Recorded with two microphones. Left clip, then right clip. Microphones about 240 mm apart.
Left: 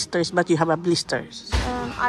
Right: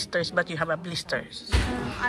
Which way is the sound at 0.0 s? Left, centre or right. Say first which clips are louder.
Left 4 dB; left.